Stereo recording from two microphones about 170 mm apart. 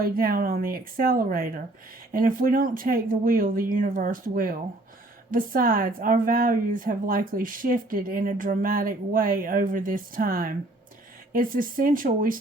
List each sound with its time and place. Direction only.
0.0 s a woman's voice: 60° right (ahead or behind)